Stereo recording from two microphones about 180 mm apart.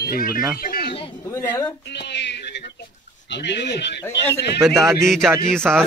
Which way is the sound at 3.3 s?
75° left (ahead or behind).